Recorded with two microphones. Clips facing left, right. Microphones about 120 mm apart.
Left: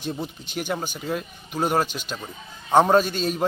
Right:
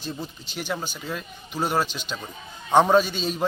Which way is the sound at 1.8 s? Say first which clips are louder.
Left 2 dB; 50° left (ahead or behind).